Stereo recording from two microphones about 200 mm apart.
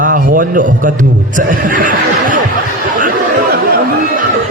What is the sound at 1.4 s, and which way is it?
Laughter, 45° right (ahead or behind).